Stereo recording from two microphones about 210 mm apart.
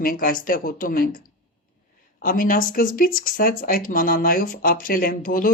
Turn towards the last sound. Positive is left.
turn(degrees=40)  # may be behind; listen again after turning